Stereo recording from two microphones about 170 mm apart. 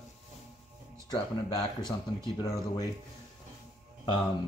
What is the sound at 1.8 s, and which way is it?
Speech, 25° left (ahead or behind).